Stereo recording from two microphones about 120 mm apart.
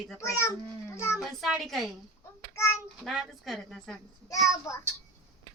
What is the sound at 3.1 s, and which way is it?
Speech, centre (ahead or behind).